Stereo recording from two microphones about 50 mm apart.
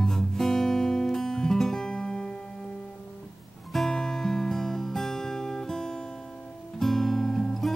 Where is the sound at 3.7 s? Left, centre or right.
Centre.